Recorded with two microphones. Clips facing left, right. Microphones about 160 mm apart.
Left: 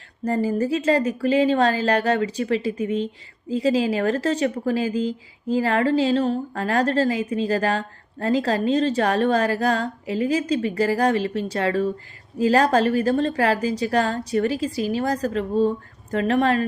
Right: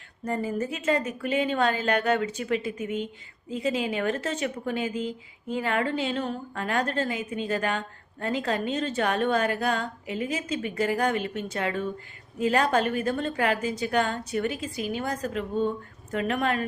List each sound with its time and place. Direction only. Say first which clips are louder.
0.3 s speech: left 7 dB; 35° left (ahead or behind)